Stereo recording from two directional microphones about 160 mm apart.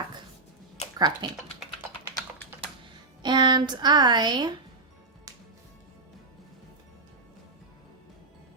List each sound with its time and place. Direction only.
0.9 s speech: 25° right (ahead or behind)
3.2 s speech: 30° right (ahead or behind)